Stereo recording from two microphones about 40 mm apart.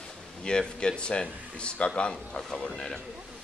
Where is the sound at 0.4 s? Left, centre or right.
Left.